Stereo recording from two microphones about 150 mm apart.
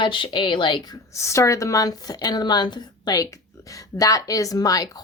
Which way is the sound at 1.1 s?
20° left (ahead or behind).